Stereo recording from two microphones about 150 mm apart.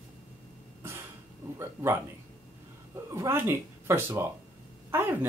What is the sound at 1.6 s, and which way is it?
Speech, 15° right (ahead or behind).